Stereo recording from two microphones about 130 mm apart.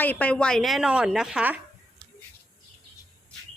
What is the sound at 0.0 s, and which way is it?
A woman's voice, 10° left (ahead or behind).